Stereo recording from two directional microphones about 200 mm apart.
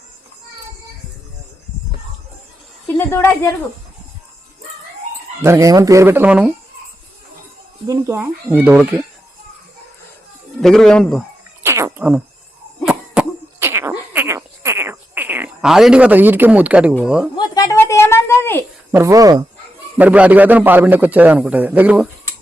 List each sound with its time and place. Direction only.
2.8 s a sound: 10° left (ahead or behind)
5.4 s a man's voice: 15° right (ahead or behind)
7.9 s a man's voice: 15° right (ahead or behind)
10.6 s speech: centre (ahead or behind)
11.6 s a sound: 10° right (ahead or behind)
12.8 s cough: 5° right (ahead or behind)
17.3 s a sound: 20° left (ahead or behind)
18.9 s a man's voice: 15° right (ahead or behind)
20.0 s a man's voice: 5° right (ahead or behind)